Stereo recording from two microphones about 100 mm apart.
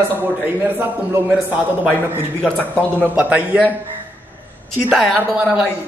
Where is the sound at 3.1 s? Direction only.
15° right (ahead or behind).